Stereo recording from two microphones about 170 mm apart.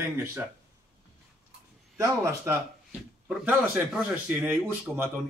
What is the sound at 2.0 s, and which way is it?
Speech, 15° right (ahead or behind).